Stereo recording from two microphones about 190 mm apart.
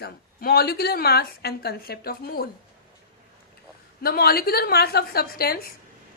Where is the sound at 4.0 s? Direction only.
55° left (ahead or behind).